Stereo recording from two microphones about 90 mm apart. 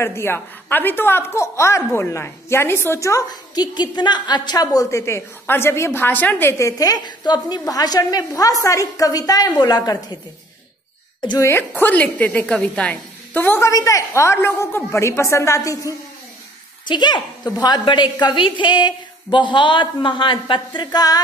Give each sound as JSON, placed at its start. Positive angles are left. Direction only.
{"t": 0.0, "sound": "a woman's voice", "side_deg": 30}
{"t": 3.3, "sound": "a woman's voice", "side_deg": 50}
{"t": 6.6, "sound": "a woman's voice", "side_deg": 40}
{"t": 7.1, "sound": "a woman's voice", "side_deg": 50}
{"t": 11.3, "sound": "a woman's voice", "side_deg": 25}
{"t": 13.6, "sound": "a woman's voice", "side_deg": 35}
{"t": 16.8, "sound": "a woman's voice", "side_deg": 55}